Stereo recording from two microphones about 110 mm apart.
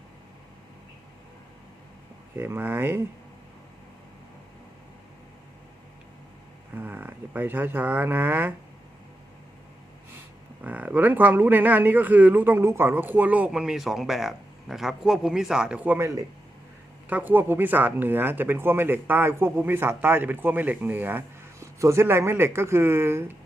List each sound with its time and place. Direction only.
2.4 s speech: 20° right (ahead or behind)
6.7 s speech: 15° right (ahead or behind)
10.6 s speech: 15° right (ahead or behind)
17.1 s speech: 15° right (ahead or behind)